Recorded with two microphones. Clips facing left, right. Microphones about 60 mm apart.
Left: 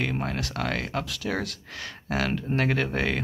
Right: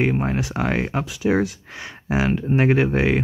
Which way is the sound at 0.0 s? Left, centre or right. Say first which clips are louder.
Right 8 dB; right.